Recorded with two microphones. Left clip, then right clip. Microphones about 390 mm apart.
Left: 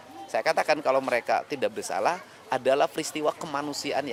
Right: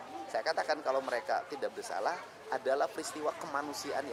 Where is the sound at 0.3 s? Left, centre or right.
Left.